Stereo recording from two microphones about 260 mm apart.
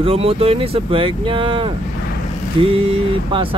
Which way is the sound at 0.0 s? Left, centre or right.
Right.